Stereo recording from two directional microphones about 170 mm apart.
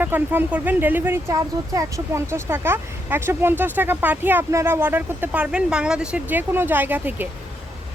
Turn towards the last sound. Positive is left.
turn(degrees=-10)  # may be behind; listen again after turning